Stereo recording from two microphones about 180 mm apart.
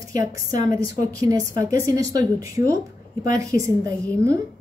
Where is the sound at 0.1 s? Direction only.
20° right (ahead or behind).